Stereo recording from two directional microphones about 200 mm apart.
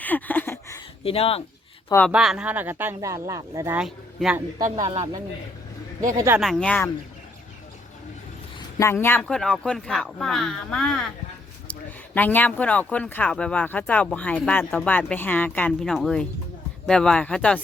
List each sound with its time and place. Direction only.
0.0 s a sound: 10° left (ahead or behind)
1.0 s speech: 30° left (ahead or behind)
1.9 s speech: 10° left (ahead or behind)
2.1 s speech: 5° right (ahead or behind)
3.8 s speech: 5° right (ahead or behind)
4.9 s speech: 25° right (ahead or behind)
6.4 s speech: 5° left (ahead or behind)
8.8 s speech: 10° left (ahead or behind)